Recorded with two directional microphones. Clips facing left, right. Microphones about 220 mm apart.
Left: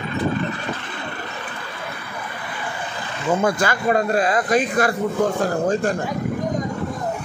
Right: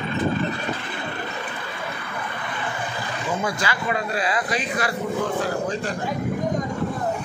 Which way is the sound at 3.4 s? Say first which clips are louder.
Left 7 dB; 50° left (ahead or behind).